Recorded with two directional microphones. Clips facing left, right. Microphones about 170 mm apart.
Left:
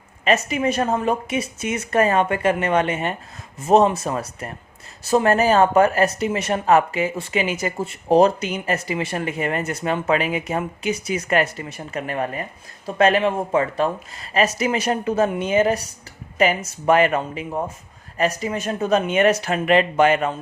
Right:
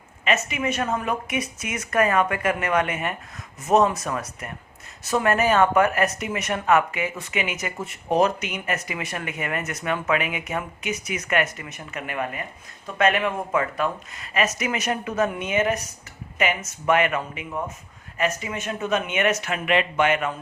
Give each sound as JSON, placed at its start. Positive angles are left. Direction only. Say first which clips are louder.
{"t": 0.3, "sound": "a woman's voice", "louder": "left 5 dB", "side_deg": 35}